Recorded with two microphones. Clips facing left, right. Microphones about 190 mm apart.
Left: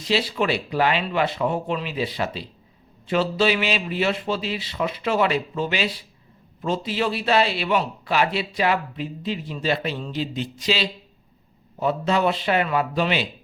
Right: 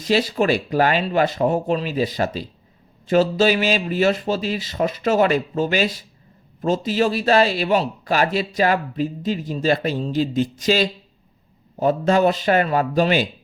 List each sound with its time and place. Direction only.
0.0 s a man's voice: 45° right (ahead or behind)